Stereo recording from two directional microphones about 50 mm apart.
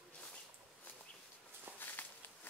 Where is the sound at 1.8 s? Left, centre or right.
Left.